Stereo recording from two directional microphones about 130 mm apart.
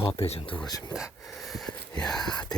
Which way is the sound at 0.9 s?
Centre (ahead or behind).